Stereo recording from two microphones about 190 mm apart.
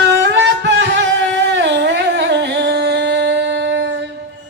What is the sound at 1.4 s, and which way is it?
Humming, 65° right (ahead or behind).